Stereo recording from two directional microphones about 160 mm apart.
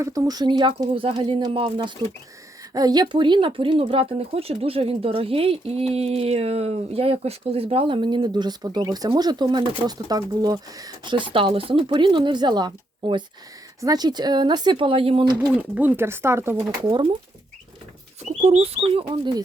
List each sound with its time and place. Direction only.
0.0 s speech: 25° right (ahead or behind)
15.4 s speech: 10° right (ahead or behind)
16.6 s speech: 25° right (ahead or behind)
18.3 s speech: 45° right (ahead or behind)
19.0 s speech: 25° right (ahead or behind)